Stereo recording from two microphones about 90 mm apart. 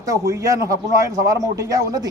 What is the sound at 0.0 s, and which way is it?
A man's voice, 40° right (ahead or behind).